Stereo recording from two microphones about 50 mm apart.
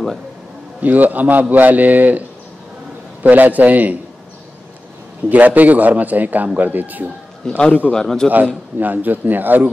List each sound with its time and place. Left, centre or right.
0.8 s a man's voice: right
5.3 s a man's voice: right
7.4 s a man's voice: centre
8.7 s a man's voice: right